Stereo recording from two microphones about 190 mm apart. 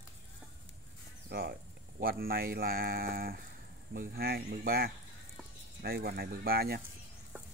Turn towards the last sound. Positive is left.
turn(degrees=-55)  # may be behind; listen again after turning